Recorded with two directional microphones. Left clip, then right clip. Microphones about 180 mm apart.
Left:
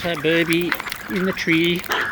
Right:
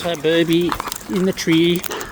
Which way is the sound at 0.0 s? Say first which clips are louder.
Right 2 dB; 30° right (ahead or behind).